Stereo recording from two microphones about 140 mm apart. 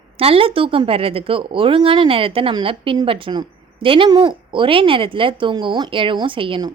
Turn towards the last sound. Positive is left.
turn(degrees=-35)  # may be behind; listen again after turning